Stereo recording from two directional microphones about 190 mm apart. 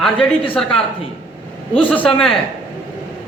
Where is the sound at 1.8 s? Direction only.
5° left (ahead or behind).